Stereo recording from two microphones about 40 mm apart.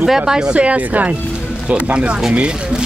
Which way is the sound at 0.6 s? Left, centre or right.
Right.